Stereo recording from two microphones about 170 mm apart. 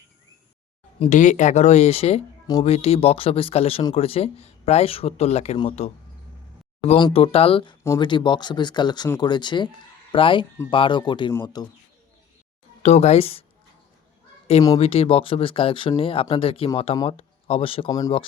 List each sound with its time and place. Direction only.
0.9 s speech: 40° left (ahead or behind); by 11.7 s 25° left (ahead or behind)
12.8 s speech: 40° left (ahead or behind)
14.8 s speech: 35° left (ahead or behind)